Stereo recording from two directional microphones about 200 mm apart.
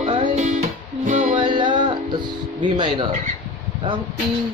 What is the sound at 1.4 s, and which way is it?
Music, 25° right (ahead or behind).